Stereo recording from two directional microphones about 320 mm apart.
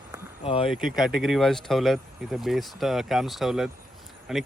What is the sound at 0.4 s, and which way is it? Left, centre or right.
Speech, centre.